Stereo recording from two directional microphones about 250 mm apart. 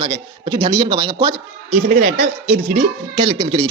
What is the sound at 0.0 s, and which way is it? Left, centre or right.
A man's voice, centre.